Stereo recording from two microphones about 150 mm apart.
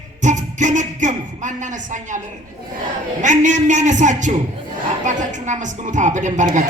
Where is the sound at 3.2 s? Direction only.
55° right (ahead or behind).